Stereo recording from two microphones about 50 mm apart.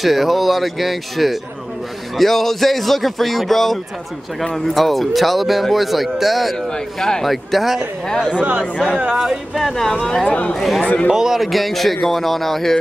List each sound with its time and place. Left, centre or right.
0.0 s speech: centre
6.7 s speech: centre
8.4 s speech: right
9.2 s speech: centre
9.8 s speech: centre
10.2 s speech: left
10.6 s speech: centre